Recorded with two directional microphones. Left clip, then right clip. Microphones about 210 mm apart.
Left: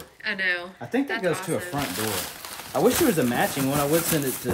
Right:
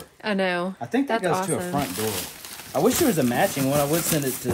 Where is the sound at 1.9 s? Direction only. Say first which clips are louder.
Even; 5° left (ahead or behind).